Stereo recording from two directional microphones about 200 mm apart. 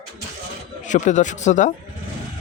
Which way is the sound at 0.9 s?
35° left (ahead or behind).